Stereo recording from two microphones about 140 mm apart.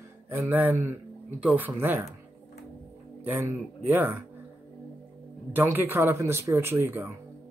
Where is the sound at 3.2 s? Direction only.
15° right (ahead or behind).